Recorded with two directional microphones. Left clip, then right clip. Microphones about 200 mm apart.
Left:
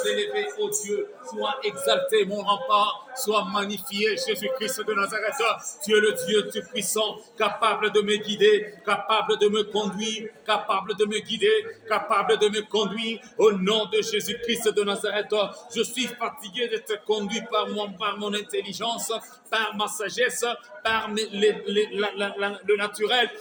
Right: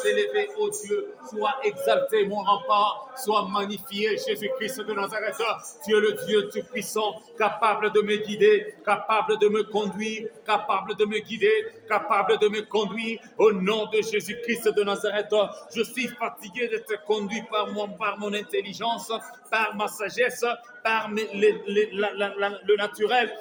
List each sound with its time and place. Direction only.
0.0 s a man's voice: 30° left (ahead or behind)
1.4 s a man's voice: 30° left (ahead or behind)
1.9 s a man's voice: 10° left (ahead or behind)